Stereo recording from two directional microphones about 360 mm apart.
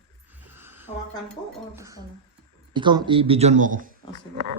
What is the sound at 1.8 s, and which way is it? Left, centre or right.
Speech, centre.